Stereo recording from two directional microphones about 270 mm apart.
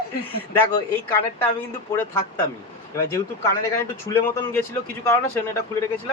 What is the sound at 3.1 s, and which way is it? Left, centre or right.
Speech, centre.